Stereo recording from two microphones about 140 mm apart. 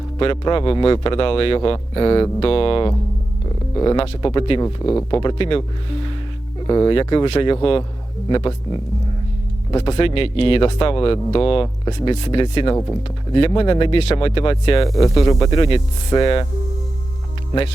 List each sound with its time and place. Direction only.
0.2 s speech: 40° left (ahead or behind)
6.7 s speech: 30° left (ahead or behind)
14.8 s speech: 25° left (ahead or behind)